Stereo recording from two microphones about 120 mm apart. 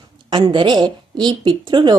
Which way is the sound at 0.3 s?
40° right (ahead or behind).